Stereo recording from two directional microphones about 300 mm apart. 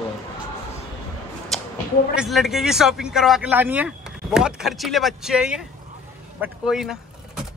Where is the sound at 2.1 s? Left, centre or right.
Centre.